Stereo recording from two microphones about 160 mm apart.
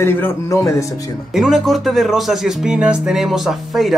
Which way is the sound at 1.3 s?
Centre (ahead or behind).